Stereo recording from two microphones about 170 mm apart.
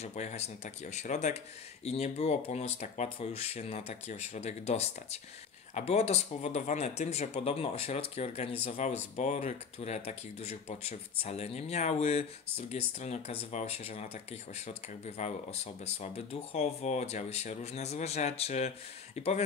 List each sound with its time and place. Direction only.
0.0 s speech: 40° left (ahead or behind)